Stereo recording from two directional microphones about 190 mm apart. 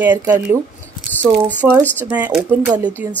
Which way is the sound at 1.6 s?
15° right (ahead or behind).